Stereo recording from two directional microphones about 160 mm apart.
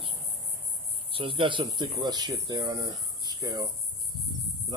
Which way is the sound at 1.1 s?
35° right (ahead or behind).